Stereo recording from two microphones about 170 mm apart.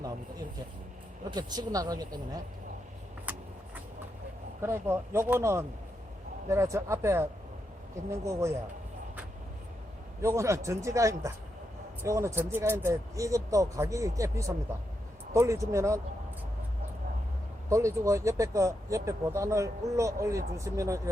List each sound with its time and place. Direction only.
1.3 s speech: 25° right (ahead or behind)
3.3 s vehicle: 10° right (ahead or behind)
4.6 s speech: 15° right (ahead or behind)
10.2 s speech: 15° right (ahead or behind)
17.7 s speech: 15° right (ahead or behind)